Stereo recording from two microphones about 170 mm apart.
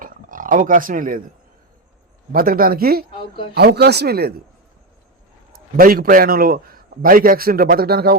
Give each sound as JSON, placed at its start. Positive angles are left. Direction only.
{"t": 0.0, "sound": "a sound", "side_deg": -50}
{"t": 2.3, "sound": "a man's voice", "side_deg": -55}
{"t": 3.1, "sound": "a woman's voice", "side_deg": 30}
{"t": 3.5, "sound": "speech", "side_deg": -70}
{"t": 5.5, "sound": "a man's voice", "side_deg": -60}